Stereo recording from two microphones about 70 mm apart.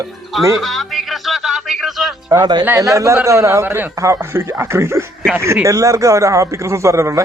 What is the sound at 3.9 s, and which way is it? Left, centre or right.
A man's voice, right.